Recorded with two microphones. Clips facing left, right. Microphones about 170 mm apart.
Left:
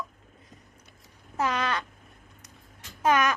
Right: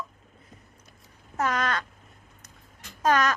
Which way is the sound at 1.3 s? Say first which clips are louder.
Right 1 dB; 10° left (ahead or behind).